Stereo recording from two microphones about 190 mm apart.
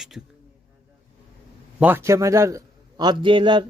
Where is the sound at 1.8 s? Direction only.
10° right (ahead or behind).